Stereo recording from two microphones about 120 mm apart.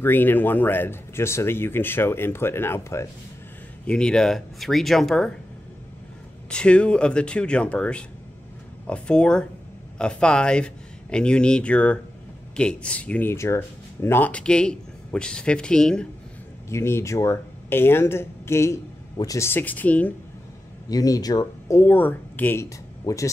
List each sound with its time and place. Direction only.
0.0 s speech: 15° left (ahead or behind)
3.8 s speech: 5° left (ahead or behind)
6.5 s speech: 10° left (ahead or behind)
16.6 s speech: 20° left (ahead or behind)
20.9 s speech: 30° left (ahead or behind)